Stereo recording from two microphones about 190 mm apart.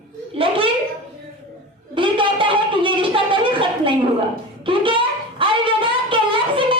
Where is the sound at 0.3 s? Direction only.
30° right (ahead or behind).